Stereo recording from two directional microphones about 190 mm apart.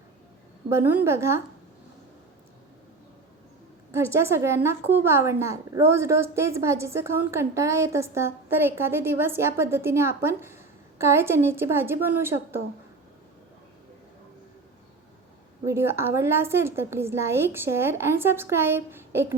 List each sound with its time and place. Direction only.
0.7 s a woman's voice: 10° right (ahead or behind)
3.9 s a woman's voice: 15° right (ahead or behind)
15.6 s a woman's voice: 15° right (ahead or behind)